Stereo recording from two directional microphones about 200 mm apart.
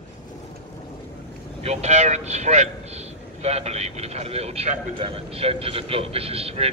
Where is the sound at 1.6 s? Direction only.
35° right (ahead or behind).